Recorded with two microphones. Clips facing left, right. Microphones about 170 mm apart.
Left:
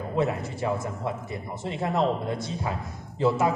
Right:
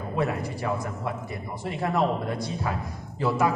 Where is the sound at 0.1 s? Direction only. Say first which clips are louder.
Left 1 dB; 25° left (ahead or behind).